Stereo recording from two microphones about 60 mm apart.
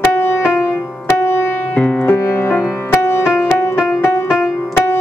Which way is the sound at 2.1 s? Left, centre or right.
Left.